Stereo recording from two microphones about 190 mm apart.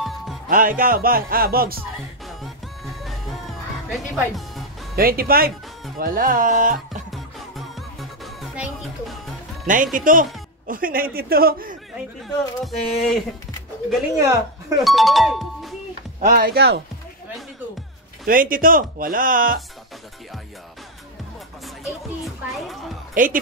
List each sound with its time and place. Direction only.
0.0 s music: centre (ahead or behind)
0.5 s speech: 45° right (ahead or behind)
2.2 s music: centre (ahead or behind)
3.9 s speech: centre (ahead or behind)
4.9 s speech: 50° right (ahead or behind)
7.1 s music: centre (ahead or behind)
9.9 s speech: 45° right (ahead or behind)
12.2 s speech: centre (ahead or behind)
14.1 s a woman's voice: 15° right (ahead or behind)
14.8 s speech: centre (ahead or behind)
16.2 s speech: 45° right (ahead or behind)
18.2 s speech: 45° right (ahead or behind)
22.2 s a sound: centre (ahead or behind)
23.2 s speech: 45° right (ahead or behind)